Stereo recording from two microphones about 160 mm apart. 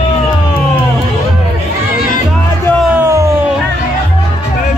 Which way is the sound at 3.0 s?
20° right (ahead or behind).